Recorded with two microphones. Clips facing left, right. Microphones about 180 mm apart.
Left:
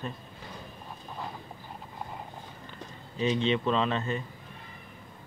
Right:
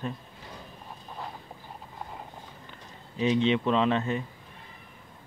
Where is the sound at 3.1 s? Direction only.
15° right (ahead or behind).